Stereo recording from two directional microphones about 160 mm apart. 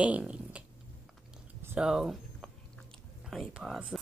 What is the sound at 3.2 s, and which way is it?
Speech, centre (ahead or behind).